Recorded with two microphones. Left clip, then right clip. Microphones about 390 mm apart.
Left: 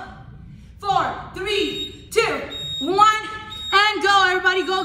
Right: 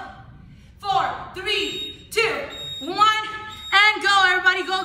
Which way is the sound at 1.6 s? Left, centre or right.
Centre.